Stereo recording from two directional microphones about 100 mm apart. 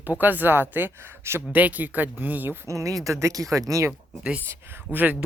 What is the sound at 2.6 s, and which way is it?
Speech, 30° right (ahead or behind).